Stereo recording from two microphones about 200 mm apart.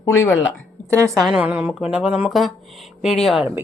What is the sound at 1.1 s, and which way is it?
Speech, centre (ahead or behind).